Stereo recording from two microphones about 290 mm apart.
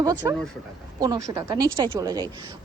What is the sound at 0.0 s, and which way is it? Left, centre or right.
A woman's voice, centre.